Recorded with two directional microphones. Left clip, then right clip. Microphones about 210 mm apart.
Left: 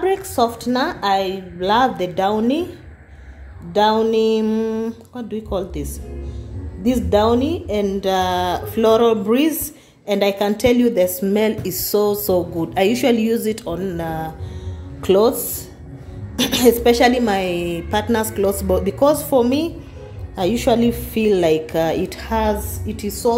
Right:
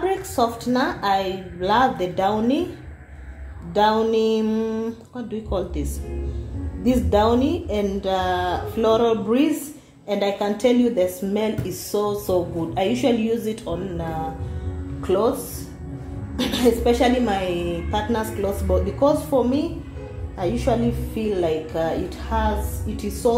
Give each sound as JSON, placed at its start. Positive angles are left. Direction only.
{"t": 0.0, "sound": "speech", "side_deg": 40}
{"t": 3.7, "sound": "speech", "side_deg": 35}
{"t": 16.3, "sound": "a woman's voice", "side_deg": 45}
{"t": 23.2, "sound": "a woman's voice", "side_deg": 30}